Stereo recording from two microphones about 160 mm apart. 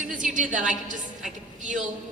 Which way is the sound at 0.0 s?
55° right (ahead or behind).